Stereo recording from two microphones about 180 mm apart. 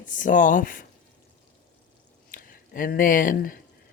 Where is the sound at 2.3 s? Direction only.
50° left (ahead or behind).